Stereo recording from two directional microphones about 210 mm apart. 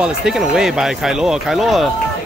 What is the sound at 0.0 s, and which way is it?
Speech, 5° right (ahead or behind).